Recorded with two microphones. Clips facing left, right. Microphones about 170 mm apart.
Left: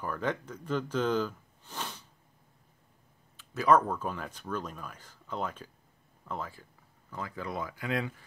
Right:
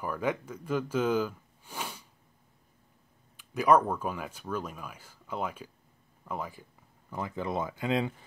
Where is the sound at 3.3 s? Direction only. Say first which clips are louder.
Right 1 dB; 15° right (ahead or behind).